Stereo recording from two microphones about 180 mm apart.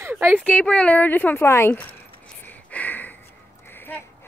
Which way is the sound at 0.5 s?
5° left (ahead or behind).